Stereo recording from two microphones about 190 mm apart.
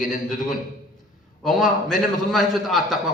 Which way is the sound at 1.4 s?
Centre (ahead or behind).